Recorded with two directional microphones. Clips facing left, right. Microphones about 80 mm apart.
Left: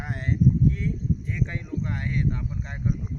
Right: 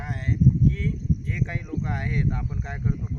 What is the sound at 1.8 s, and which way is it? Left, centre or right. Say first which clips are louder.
Speech: even; centre.